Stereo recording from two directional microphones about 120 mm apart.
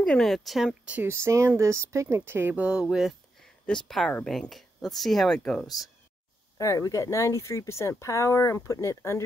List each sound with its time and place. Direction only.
0.0 s speech: 5° left (ahead or behind)
0.8 s speech: 15° right (ahead or behind)
1.1 s speech: 25° right (ahead or behind); by 5.7 s 5° left (ahead or behind)
6.6 s speech: 25° left (ahead or behind)